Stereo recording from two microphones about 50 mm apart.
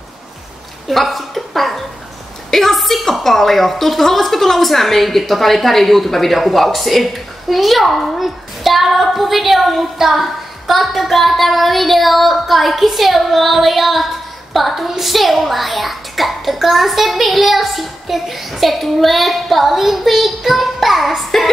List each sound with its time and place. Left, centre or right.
0.8 s a woman's voice: centre